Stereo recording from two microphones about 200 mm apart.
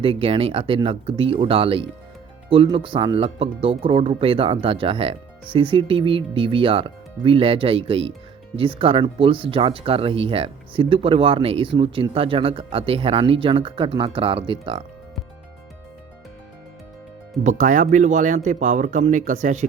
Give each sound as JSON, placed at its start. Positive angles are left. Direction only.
{"t": 0.0, "sound": "speech", "side_deg": -25}
{"t": 17.4, "sound": "speech", "side_deg": -40}